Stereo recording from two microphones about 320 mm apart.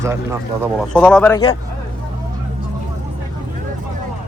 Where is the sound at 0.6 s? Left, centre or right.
Centre.